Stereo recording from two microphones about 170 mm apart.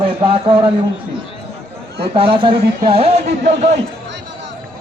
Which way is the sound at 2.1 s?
30° right (ahead or behind).